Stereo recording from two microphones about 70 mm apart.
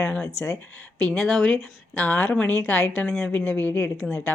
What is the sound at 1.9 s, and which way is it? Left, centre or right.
Speech, left.